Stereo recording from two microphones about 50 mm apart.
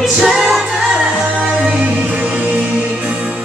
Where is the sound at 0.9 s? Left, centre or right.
Right.